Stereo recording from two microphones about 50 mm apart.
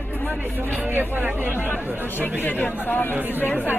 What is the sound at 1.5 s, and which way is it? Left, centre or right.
Speech, left.